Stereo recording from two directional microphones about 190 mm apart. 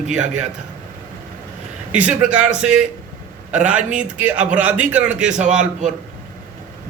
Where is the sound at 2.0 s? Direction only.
5° right (ahead or behind).